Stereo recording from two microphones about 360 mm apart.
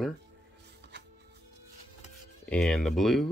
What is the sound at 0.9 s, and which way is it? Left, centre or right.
Music, right.